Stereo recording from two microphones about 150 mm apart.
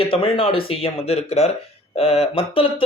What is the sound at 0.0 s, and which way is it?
Speech, 35° left (ahead or behind).